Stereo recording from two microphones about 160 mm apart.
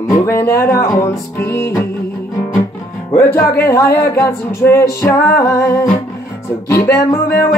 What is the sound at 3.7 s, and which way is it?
Music, 15° left (ahead or behind).